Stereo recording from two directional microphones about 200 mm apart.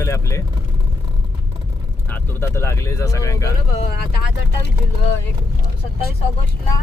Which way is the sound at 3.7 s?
45° left (ahead or behind).